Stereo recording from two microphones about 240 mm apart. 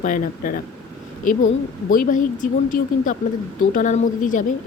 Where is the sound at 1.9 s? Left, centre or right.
Left.